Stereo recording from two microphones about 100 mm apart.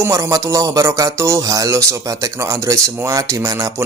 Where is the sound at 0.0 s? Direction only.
30° right (ahead or behind).